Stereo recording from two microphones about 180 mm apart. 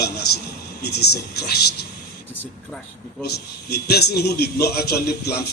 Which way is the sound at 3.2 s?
65° left (ahead or behind).